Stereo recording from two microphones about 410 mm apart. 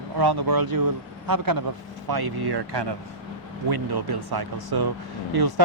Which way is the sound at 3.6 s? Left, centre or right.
Right.